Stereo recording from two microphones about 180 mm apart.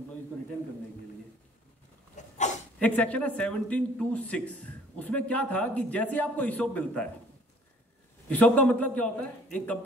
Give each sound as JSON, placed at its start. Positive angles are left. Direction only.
{"t": 2.3, "sound": "dog", "side_deg": 40}
{"t": 2.8, "sound": "speech", "side_deg": 5}
{"t": 8.3, "sound": "speech", "side_deg": 10}